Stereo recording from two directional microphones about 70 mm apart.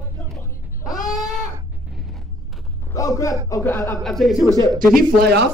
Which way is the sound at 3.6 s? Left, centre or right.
Left.